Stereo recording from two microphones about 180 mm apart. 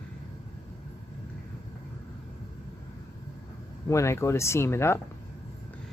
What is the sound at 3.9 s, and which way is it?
Speech, 15° left (ahead or behind).